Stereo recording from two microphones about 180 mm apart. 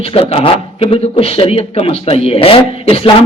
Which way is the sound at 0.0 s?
30° left (ahead or behind).